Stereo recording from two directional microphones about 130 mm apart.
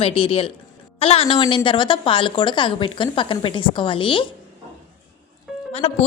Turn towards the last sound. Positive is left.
turn(degrees=50)  # may be behind; listen again after turning